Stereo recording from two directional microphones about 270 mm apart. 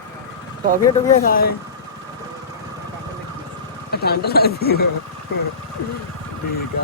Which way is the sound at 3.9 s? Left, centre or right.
Left.